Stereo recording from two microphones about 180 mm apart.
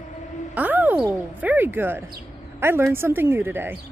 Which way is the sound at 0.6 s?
10° right (ahead or behind).